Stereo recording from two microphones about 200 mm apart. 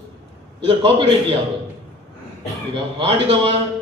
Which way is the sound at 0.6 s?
25° right (ahead or behind).